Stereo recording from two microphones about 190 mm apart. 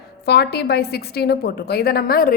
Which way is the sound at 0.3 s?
60° left (ahead or behind).